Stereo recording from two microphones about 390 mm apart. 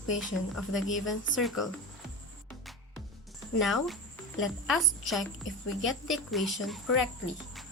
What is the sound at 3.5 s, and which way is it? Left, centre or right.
Speech, centre.